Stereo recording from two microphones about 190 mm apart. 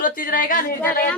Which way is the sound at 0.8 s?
10° left (ahead or behind).